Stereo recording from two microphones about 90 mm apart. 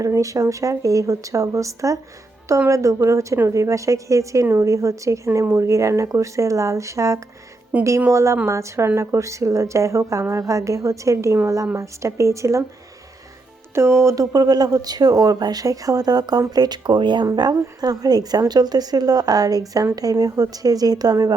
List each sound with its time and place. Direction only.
0.0 s a woman's voice: 40° right (ahead or behind)
7.7 s speech: 15° right (ahead or behind)
8.1 s a woman's voice: 35° right (ahead or behind)
13.7 s speech: 30° right (ahead or behind); by 17.2 s 60° right (ahead or behind)
17.2 s speech: 50° right (ahead or behind)